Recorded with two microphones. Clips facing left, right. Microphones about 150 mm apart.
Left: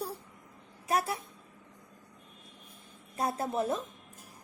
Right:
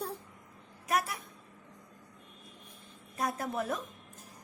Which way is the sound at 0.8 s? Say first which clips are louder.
Left 2 dB; 30° left (ahead or behind).